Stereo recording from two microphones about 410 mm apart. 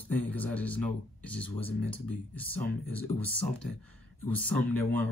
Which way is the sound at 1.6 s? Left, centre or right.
Right.